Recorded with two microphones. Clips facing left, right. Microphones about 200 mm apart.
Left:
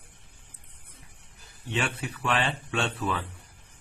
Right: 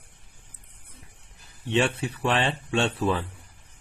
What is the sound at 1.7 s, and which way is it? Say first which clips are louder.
Speech: right 7 dB; 30° right (ahead or behind).